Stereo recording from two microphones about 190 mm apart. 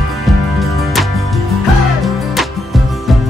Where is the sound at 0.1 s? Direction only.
Centre (ahead or behind).